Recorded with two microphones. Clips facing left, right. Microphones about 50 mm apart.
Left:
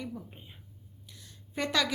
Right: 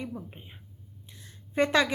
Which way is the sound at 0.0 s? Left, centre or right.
Right.